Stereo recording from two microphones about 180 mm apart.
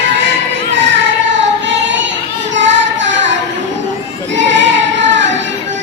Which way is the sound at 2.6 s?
90° right.